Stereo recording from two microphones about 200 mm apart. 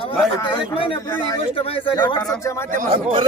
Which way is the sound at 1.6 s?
30° left (ahead or behind).